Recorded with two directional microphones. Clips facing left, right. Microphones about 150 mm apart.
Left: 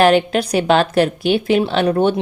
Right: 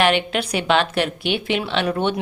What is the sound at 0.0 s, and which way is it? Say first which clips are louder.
Speech: left 6 dB; 40° left (ahead or behind).